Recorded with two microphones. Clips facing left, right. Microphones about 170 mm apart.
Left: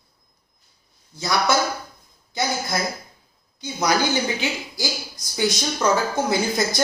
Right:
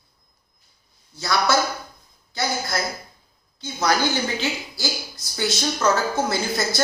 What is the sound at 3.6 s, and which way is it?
Speech, 15° left (ahead or behind).